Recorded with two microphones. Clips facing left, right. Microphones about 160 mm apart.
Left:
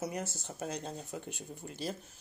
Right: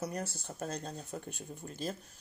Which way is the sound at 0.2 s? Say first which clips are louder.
Even; 60° right (ahead or behind).